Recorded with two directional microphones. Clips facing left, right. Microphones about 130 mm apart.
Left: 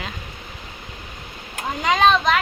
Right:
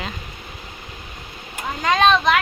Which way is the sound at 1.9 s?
5° left (ahead or behind).